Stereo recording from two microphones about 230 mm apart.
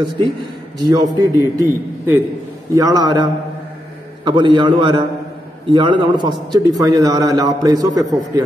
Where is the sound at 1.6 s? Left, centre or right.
Centre.